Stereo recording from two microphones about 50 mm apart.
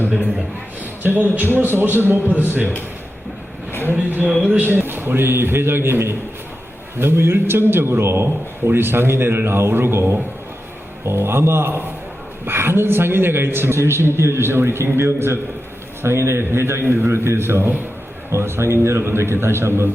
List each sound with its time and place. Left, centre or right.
0.3 s a man's voice: right
3.7 s a sound: left
4.4 s speech: right
4.7 s a man's voice: right